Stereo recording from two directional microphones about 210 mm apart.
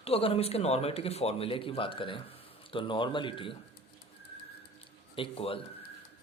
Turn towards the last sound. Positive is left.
turn(degrees=25)  # may be behind; listen again after turning